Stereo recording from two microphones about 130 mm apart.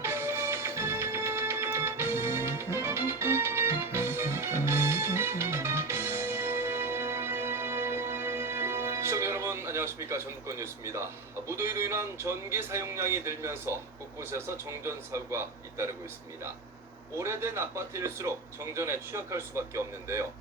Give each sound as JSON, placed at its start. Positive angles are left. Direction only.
{"t": 0.0, "sound": "music", "side_deg": -20}
{"t": 11.4, "sound": "speech", "side_deg": -20}
{"t": 17.2, "sound": "speech", "side_deg": -20}